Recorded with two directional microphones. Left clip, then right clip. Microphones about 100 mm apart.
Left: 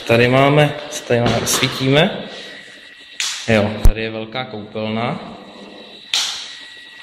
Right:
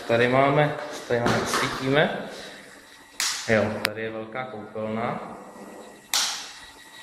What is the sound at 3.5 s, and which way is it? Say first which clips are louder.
A man's voice: left 6 dB; 25° left (ahead or behind).